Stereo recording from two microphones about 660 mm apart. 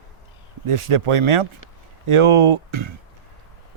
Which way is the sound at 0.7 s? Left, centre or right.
Right.